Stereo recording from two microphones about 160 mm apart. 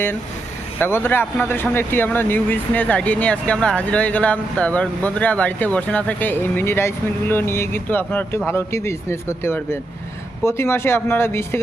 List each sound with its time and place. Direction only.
0.8 s speech: 15° left (ahead or behind)